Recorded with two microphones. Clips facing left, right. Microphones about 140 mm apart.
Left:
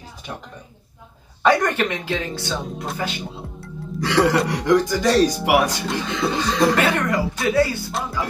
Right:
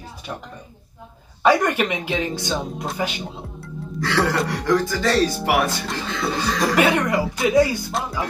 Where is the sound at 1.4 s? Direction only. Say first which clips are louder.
Even; 10° right (ahead or behind).